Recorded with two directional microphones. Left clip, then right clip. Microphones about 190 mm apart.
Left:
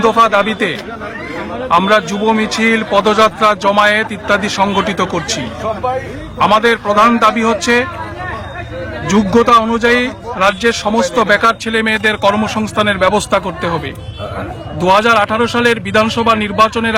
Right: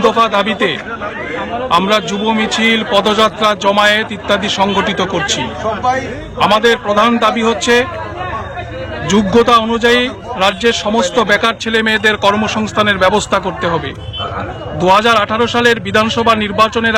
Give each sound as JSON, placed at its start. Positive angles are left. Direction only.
{"t": 0.0, "sound": "a man's voice", "side_deg": 15}
{"t": 6.4, "sound": "a man's voice", "side_deg": 10}
{"t": 9.0, "sound": "a man's voice", "side_deg": 15}
{"t": 14.8, "sound": "a man's voice", "side_deg": 15}